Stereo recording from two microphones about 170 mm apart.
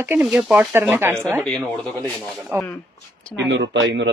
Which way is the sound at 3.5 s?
90° right.